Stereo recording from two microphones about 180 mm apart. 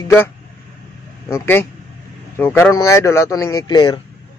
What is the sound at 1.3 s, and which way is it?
Speech, 15° left (ahead or behind).